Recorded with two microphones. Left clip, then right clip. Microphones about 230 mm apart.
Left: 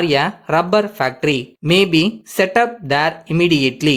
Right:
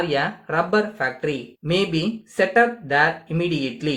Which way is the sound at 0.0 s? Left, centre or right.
Left.